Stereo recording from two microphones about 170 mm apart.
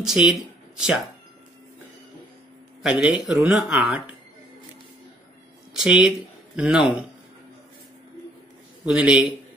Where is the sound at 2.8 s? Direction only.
5° right (ahead or behind).